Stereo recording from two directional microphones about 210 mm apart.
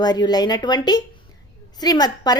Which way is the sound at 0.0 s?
20° left (ahead or behind).